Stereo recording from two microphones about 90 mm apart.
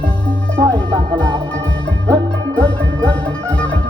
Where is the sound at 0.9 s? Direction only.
60° right (ahead or behind).